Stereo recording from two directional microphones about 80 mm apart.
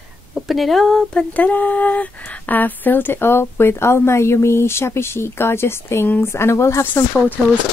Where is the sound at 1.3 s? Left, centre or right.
Centre; by 6.8 s left.